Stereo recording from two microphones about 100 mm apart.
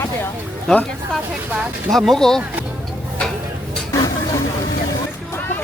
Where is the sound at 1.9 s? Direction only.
5° left (ahead or behind).